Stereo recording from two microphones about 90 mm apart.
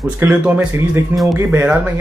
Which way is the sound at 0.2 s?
20° right (ahead or behind).